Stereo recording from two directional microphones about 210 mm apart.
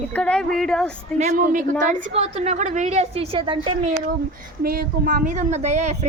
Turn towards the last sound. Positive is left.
turn(degrees=-35)  # may be behind; listen again after turning